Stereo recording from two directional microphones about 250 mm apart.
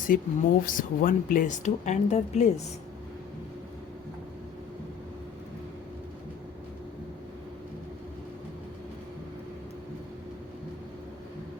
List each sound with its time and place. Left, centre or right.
0.1 s speech: left